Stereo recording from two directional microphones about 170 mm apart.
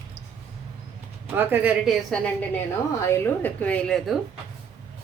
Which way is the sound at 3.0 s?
15° left (ahead or behind).